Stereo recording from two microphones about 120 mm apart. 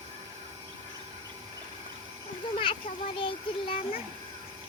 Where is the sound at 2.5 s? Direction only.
50° left (ahead or behind).